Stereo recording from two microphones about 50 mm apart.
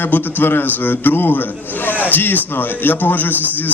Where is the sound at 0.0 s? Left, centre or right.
Left.